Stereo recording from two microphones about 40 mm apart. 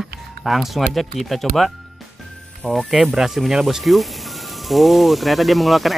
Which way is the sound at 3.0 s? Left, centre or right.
Centre.